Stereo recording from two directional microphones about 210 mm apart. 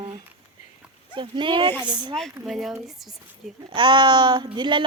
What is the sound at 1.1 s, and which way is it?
Speech, 25° right (ahead or behind).